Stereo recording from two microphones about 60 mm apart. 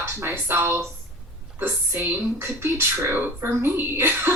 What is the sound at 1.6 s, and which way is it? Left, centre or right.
A woman's voice, right.